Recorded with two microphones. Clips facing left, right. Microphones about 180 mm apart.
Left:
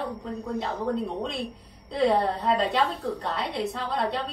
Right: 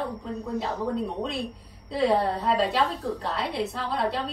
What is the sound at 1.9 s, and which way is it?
A woman's voice, centre (ahead or behind).